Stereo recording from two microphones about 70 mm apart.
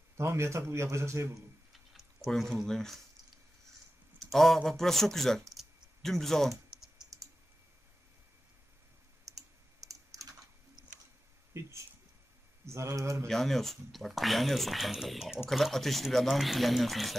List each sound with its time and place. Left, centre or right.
0.2 s a man's voice: right
1.7 s a sound: centre
2.5 s speech: centre
4.3 s speech: centre
5.6 s typing: centre
9.3 s clicking: right
9.8 s computer keyboard: right
12.6 s a man's voice: right
13.3 s speech: centre